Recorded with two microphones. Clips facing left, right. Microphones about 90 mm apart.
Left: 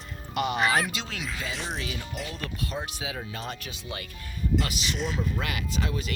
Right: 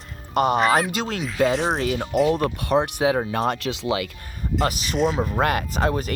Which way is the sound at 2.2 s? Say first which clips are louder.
Right 14 dB; 60° right (ahead or behind).